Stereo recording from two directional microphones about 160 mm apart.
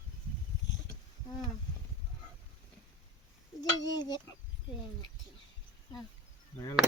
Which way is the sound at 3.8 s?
25° left (ahead or behind).